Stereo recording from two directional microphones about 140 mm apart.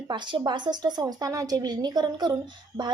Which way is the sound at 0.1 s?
35° right (ahead or behind).